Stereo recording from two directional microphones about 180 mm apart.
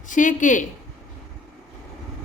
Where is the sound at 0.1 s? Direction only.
45° left (ahead or behind).